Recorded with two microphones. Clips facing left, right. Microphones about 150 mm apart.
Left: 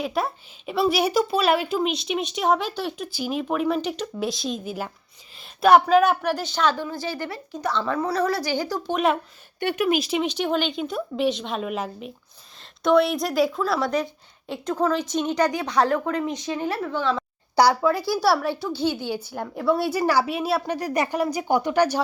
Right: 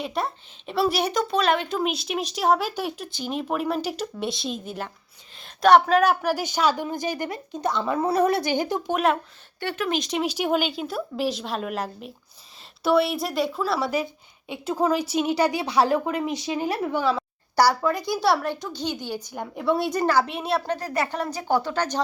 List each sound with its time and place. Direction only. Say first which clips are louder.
0.0 s a woman's voice: left 2 dB; centre (ahead or behind)
3.1 s a woman's voice: left 2 dB; 5° left (ahead or behind)
6.4 s a woman's voice: even; 10° right (ahead or behind)
8.9 s a woman's voice: left 1 dB; 5° right (ahead or behind)
9.6 s a woman's voice: left 4 dB; 15° left (ahead or behind); by 17.2 s 10° right (ahead or behind)
17.6 s a woman's voice: left 2 dB; 10° left (ahead or behind)
18.6 s a woman's voice: left 6 dB; 15° right (ahead or behind)
19.3 s a woman's voice: left 1 dB; centre (ahead or behind)